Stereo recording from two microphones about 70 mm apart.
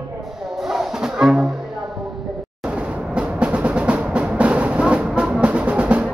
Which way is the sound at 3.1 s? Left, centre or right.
Centre.